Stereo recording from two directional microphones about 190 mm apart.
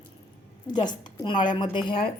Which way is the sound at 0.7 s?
20° left (ahead or behind).